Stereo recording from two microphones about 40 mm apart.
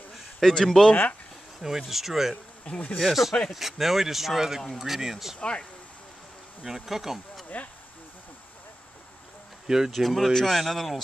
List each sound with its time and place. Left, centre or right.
0.4 s speech: centre
1.6 s speech: centre
2.7 s speech: left
3.0 s speech: centre
5.4 s speech: left
6.6 s speech: centre
7.4 s speech: left
9.7 s speech: centre
9.9 s speech: centre